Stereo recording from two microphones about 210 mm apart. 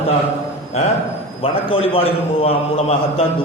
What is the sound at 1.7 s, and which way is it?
A man's voice, 25° left (ahead or behind).